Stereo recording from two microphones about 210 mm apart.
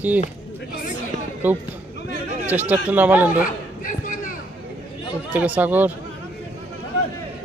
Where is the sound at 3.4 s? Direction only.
40° left (ahead or behind).